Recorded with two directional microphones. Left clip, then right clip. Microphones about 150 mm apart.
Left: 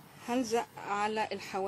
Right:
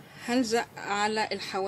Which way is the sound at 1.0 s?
Centre (ahead or behind).